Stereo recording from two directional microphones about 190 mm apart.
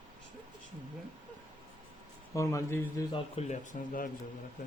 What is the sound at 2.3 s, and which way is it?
Speech, 15° left (ahead or behind).